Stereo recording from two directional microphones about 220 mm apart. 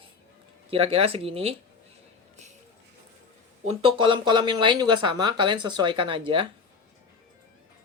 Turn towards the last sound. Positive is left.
turn(degrees=-25)  # may be behind; listen again after turning